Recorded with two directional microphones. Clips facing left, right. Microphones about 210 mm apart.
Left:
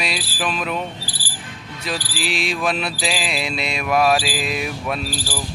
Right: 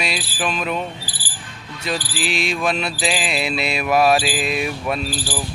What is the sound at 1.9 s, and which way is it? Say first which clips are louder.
Mantra: right 2 dB; centre (ahead or behind).